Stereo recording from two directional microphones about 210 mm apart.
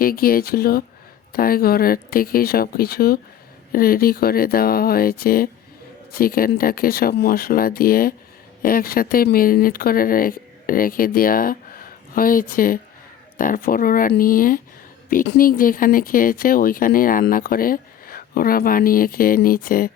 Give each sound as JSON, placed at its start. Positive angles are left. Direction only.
{"t": 0.0, "sound": "speech", "side_deg": 45}